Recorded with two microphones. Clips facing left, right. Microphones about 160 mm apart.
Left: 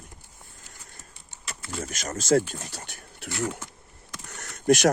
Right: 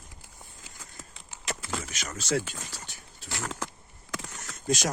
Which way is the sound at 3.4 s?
90° right.